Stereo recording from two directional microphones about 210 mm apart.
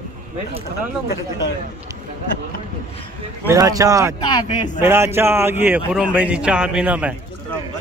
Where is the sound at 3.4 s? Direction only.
15° right (ahead or behind).